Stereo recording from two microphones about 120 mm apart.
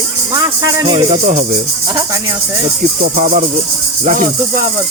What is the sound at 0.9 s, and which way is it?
Speech, 70° right (ahead or behind).